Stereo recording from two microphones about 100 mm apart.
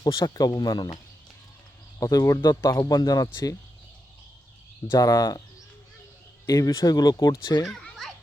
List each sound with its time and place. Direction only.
0.0 s speech: 40° left (ahead or behind)
2.0 s speech: 35° left (ahead or behind)
4.9 s speech: 35° left (ahead or behind)
6.5 s speech: 35° left (ahead or behind)
7.6 s children playing: centre (ahead or behind)